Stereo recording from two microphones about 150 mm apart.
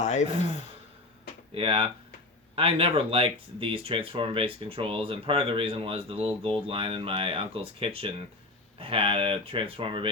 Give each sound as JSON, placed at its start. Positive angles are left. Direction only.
{"t": 0.0, "sound": "speech", "side_deg": 50}
{"t": 1.5, "sound": "speech", "side_deg": -35}